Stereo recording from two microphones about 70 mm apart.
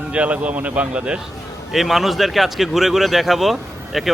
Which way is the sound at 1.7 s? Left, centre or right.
Centre.